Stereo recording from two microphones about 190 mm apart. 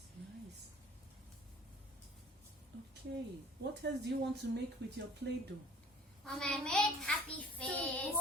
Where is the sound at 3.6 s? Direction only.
65° right (ahead or behind).